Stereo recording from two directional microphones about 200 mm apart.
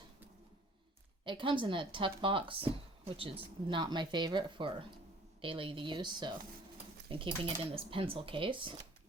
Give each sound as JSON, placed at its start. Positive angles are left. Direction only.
{"t": 1.2, "sound": "speech", "side_deg": -25}